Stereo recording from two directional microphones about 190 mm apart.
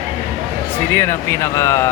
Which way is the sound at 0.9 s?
10° left (ahead or behind).